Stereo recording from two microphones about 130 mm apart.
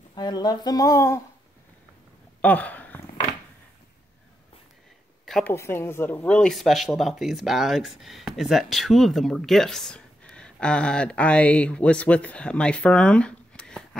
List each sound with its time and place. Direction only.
0.1 s speech: 35° left (ahead or behind)
2.4 s speech: 10° left (ahead or behind)
5.4 s speech: 20° left (ahead or behind)